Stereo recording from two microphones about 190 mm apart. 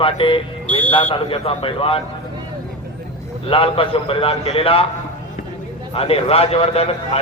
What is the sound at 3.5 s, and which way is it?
A man's voice, 30° left (ahead or behind).